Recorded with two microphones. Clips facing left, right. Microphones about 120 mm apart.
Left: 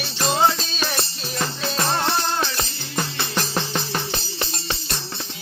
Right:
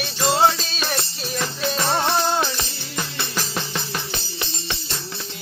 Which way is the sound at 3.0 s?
25° left (ahead or behind).